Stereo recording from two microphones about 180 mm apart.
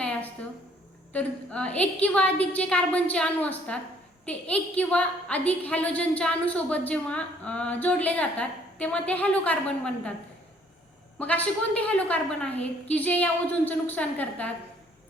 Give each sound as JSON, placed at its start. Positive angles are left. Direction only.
{"t": 0.0, "sound": "a sound", "side_deg": 10}
{"t": 1.1, "sound": "a woman's voice", "side_deg": 5}
{"t": 11.2, "sound": "a woman's voice", "side_deg": 10}